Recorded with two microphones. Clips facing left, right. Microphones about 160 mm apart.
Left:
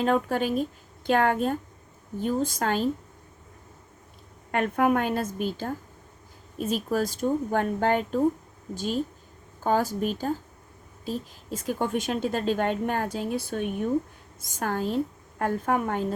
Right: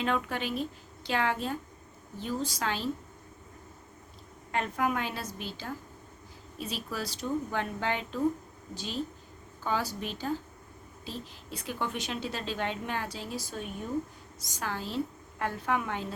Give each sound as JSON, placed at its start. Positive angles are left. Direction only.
{"t": 0.0, "sound": "a woman's voice", "side_deg": 40}
{"t": 4.5, "sound": "a woman's voice", "side_deg": 55}